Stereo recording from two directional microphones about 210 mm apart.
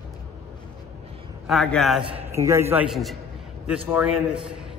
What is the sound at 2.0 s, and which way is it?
Speech, 25° right (ahead or behind).